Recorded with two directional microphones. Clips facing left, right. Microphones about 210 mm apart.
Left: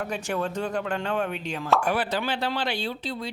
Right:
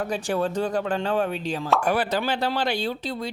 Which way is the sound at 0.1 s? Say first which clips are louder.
Right 4 dB; 35° right (ahead or behind).